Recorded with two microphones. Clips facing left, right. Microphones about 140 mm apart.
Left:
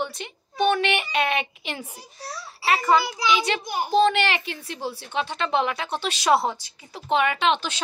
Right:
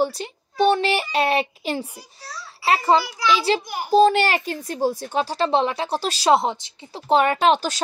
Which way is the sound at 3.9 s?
40° right (ahead or behind).